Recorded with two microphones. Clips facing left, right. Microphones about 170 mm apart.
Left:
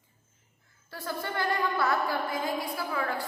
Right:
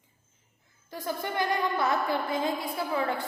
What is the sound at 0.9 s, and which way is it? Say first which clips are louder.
A woman's voice: right 2 dB; 15° right (ahead or behind).